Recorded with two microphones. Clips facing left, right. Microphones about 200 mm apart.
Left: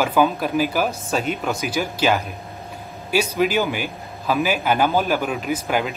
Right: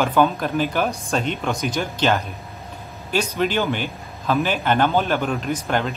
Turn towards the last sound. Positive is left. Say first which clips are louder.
# left 1 dB
turn(degrees=5)  # may be behind; listen again after turning